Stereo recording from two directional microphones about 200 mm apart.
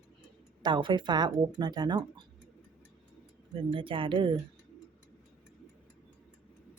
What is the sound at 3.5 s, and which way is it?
Speech, 25° right (ahead or behind).